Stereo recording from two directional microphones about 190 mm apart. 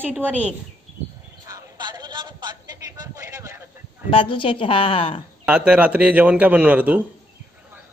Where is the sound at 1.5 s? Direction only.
20° right (ahead or behind).